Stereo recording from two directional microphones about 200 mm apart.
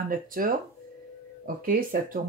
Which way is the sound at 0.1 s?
45° right (ahead or behind).